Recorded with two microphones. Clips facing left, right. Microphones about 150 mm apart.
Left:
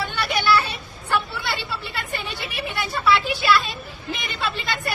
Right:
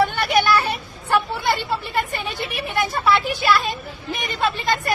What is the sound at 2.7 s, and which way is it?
Vehicle, 45° right (ahead or behind).